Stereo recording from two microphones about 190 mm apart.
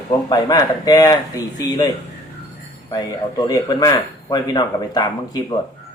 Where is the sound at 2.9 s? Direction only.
20° left (ahead or behind).